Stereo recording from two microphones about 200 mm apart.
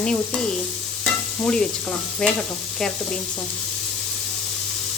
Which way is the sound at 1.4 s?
5° left (ahead or behind).